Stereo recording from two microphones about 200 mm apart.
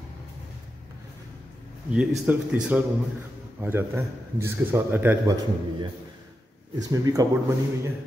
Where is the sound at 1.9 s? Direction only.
5° right (ahead or behind).